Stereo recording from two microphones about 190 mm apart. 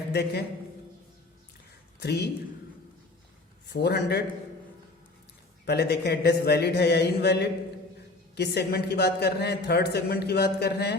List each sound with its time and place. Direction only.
0.1 s speech: 60° left (ahead or behind)
2.0 s speech: 60° left (ahead or behind)
3.7 s speech: 60° left (ahead or behind)
5.6 s speech: 60° left (ahead or behind)